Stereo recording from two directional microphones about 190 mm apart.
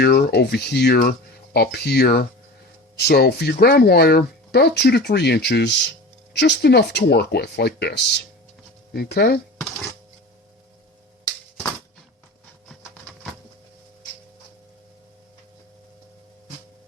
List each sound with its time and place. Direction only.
0.0 s speech: 55° left (ahead or behind)